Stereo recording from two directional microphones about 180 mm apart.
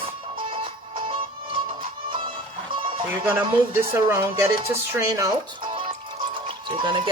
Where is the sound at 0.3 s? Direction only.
30° right (ahead or behind).